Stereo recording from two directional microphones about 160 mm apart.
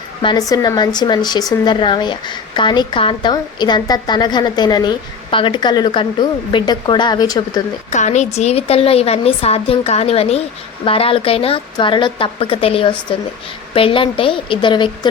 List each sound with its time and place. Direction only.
0.2 s speech: 25° left (ahead or behind)
7.9 s a woman's voice: 45° left (ahead or behind); by 14.8 s 30° left (ahead or behind)